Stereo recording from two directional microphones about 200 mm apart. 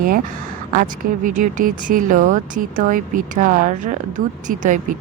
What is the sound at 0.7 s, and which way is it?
Speech, 40° right (ahead or behind).